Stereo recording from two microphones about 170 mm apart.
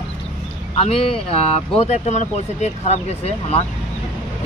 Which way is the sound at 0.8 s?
35° left (ahead or behind).